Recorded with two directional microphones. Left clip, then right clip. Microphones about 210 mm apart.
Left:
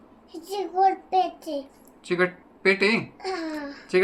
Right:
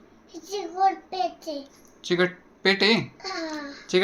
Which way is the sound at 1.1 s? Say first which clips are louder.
Left 5 dB; 15° left (ahead or behind).